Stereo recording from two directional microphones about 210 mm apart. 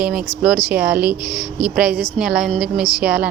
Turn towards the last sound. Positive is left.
turn(degrees=-5)  # may be behind; listen again after turning